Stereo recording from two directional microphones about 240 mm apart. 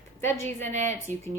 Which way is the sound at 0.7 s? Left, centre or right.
Right.